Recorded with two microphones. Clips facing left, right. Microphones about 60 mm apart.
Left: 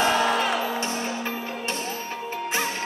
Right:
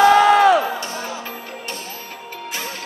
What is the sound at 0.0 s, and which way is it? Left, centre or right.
Music, right.